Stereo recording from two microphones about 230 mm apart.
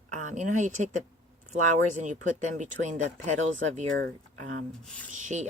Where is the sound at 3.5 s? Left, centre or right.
Right.